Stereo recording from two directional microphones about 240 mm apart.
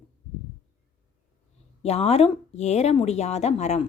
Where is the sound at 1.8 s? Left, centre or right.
Left.